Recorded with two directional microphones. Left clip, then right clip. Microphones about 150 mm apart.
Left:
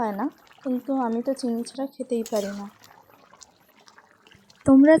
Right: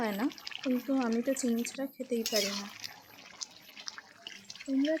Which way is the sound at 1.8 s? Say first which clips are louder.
Left 7 dB; 25° left (ahead or behind).